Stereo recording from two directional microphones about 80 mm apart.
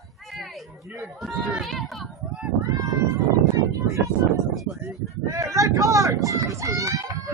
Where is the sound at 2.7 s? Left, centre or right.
Right.